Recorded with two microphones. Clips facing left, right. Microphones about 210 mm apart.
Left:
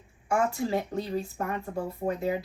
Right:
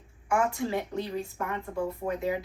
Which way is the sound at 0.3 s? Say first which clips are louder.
Left 1 dB; 40° left (ahead or behind).